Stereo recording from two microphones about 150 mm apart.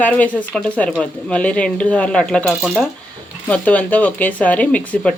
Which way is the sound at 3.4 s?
10° left (ahead or behind).